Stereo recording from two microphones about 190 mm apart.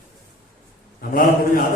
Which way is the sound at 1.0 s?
45° left (ahead or behind).